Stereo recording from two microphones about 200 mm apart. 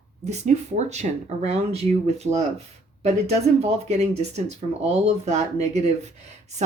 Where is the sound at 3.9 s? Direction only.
35° right (ahead or behind).